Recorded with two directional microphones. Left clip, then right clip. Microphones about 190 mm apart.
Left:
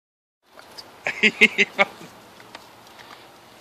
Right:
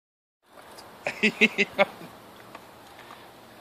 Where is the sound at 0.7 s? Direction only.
40° right (ahead or behind).